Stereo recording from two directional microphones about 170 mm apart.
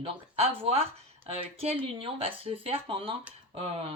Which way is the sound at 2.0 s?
35° right (ahead or behind).